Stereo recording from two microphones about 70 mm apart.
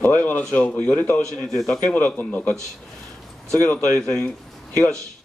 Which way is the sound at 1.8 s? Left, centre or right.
Centre.